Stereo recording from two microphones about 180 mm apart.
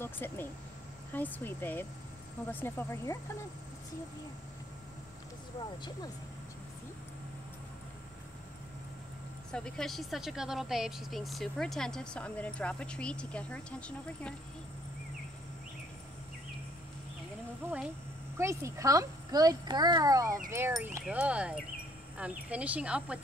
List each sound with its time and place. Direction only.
0.0 s speech: 10° left (ahead or behind)
9.5 s a woman's voice: 5° left (ahead or behind)
17.6 s a sound: 10° right (ahead or behind)
18.4 s a child's voice: 15° right (ahead or behind)
20.8 s speech: 10° right (ahead or behind)